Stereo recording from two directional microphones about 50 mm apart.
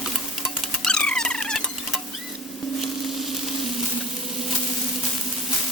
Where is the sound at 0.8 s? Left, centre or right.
Centre.